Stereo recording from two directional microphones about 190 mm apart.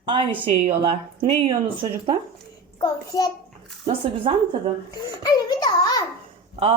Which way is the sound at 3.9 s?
30° right (ahead or behind).